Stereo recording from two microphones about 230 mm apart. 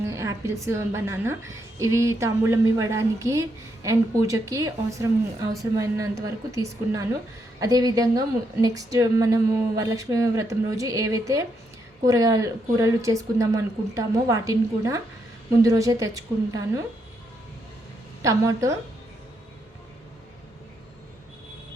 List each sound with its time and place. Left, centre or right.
0.1 s a woman's voice: centre
18.2 s a woman's voice: centre